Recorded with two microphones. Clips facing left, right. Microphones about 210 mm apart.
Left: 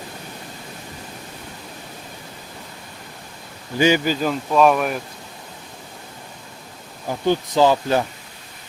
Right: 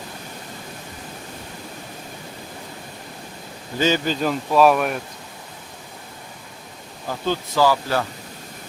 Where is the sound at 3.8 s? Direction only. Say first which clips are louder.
Left 3 dB; 15° left (ahead or behind).